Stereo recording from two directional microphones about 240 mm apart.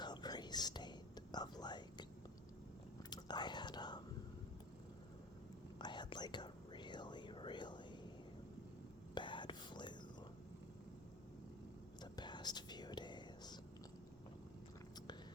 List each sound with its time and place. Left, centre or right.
0.0 s whispering: centre
3.1 s whispering: centre
5.8 s whispering: centre
9.1 s whispering: centre
12.1 s whispering: centre